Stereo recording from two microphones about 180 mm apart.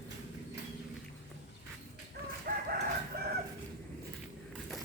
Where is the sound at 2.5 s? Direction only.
60° right (ahead or behind).